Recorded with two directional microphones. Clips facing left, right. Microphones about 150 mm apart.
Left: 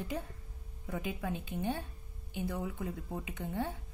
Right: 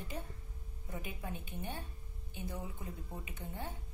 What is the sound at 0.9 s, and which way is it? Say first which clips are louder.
A woman's voice: left 7 dB; 85° left.